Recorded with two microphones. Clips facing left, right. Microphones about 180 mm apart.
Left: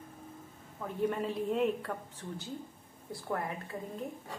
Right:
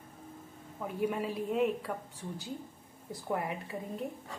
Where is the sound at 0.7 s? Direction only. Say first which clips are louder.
Even; 10° right (ahead or behind).